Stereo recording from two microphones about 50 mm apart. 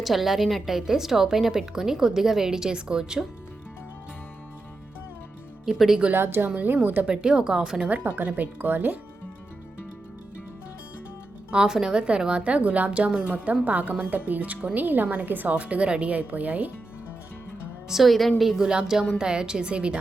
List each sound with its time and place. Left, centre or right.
0.0 s a woman's voice: centre
5.6 s speech: centre
6.1 s a woman's voice: right
7.0 s a woman's voice: centre
7.9 s a woman's voice: right
11.5 s a woman's voice: centre; by 16.7 s right
17.8 s a woman's voice: centre; by 20.0 s right